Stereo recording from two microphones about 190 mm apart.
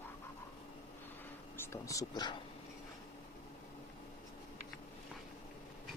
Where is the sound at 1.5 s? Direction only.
15° left (ahead or behind).